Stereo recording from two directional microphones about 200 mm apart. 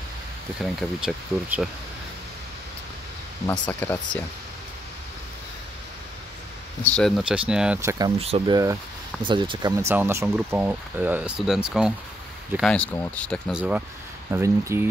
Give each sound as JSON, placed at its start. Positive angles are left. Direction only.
{"t": 0.6, "sound": "speech", "side_deg": 0}
{"t": 3.4, "sound": "speech", "side_deg": 10}
{"t": 6.8, "sound": "speech", "side_deg": 5}
{"t": 8.2, "sound": "speech", "side_deg": -30}